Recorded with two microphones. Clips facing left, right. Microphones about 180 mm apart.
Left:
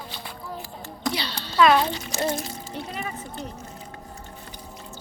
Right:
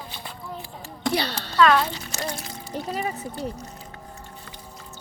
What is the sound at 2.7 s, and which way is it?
Speech, 40° right (ahead or behind).